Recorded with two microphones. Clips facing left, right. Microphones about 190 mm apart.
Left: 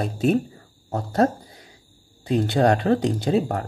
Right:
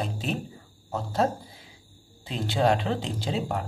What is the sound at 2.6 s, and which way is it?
Speech, 50° left (ahead or behind).